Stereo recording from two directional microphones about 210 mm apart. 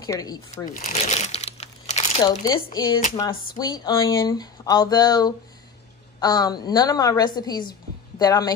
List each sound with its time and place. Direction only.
0.0 s speech: 20° left (ahead or behind)
0.7 s crumpling: 40° left (ahead or behind)
2.4 s speech: 20° left (ahead or behind)